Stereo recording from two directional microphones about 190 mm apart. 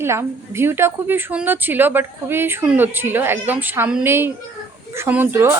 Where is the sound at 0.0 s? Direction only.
15° right (ahead or behind).